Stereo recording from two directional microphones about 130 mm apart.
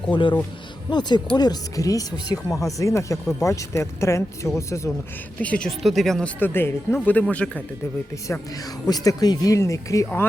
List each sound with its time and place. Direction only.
0.1 s a man's voice: 35° left (ahead or behind)
5.4 s speech: 10° left (ahead or behind)
8.3 s speech: 30° left (ahead or behind)